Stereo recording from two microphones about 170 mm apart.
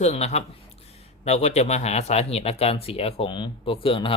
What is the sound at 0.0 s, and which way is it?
A man's voice, 40° left (ahead or behind).